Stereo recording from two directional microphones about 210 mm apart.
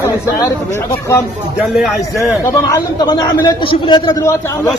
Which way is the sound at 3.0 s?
20° left (ahead or behind).